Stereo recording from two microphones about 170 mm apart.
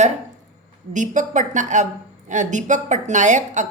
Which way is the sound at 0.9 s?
45° right (ahead or behind).